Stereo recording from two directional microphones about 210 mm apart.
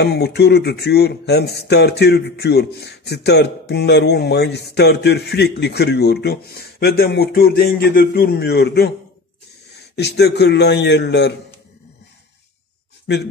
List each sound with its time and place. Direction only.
0.0 s speech: 50° left (ahead or behind)
13.0 s speech: 55° left (ahead or behind)